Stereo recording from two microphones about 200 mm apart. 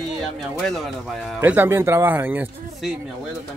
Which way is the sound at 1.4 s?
10° right (ahead or behind).